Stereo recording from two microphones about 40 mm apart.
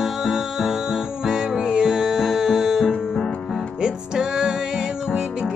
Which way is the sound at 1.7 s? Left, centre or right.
Centre.